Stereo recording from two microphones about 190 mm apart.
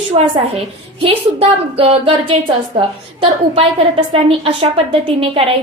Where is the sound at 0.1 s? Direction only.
30° right (ahead or behind).